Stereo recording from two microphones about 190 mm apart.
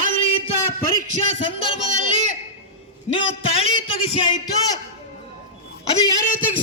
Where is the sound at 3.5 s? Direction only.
30° left (ahead or behind).